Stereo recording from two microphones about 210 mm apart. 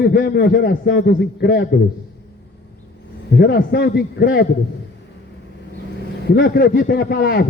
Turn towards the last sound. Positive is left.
turn(degrees=50)  # may be behind; listen again after turning